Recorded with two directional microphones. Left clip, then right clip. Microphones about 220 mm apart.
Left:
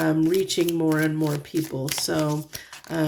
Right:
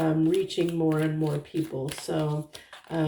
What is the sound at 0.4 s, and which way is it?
Speech, 50° left (ahead or behind).